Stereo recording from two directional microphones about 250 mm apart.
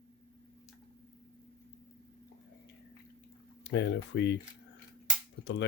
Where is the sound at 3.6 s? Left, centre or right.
Left.